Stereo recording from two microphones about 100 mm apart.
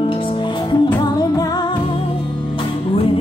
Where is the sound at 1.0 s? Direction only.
40° left (ahead or behind).